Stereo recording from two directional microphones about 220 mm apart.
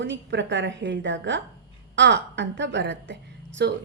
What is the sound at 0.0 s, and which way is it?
A woman's voice, 55° right (ahead or behind).